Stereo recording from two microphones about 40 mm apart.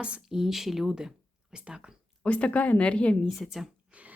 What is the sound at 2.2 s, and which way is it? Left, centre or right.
Speech, left.